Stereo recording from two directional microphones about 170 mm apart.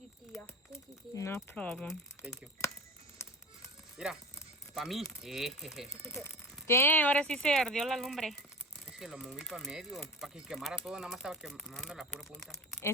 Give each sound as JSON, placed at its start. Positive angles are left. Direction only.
{"t": 1.1, "sound": "speech", "side_deg": 15}
{"t": 3.9, "sound": "speech", "side_deg": -5}
{"t": 6.2, "sound": "speech", "side_deg": 15}